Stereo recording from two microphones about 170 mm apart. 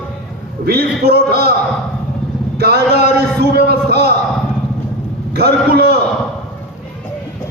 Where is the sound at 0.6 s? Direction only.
65° right (ahead or behind).